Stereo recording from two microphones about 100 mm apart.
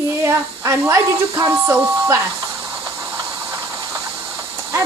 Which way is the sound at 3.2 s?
35° right (ahead or behind).